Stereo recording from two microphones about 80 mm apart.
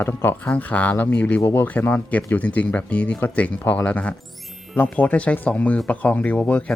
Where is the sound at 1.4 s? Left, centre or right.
Left.